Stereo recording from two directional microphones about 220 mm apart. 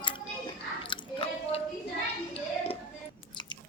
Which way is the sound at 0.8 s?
20° left (ahead or behind).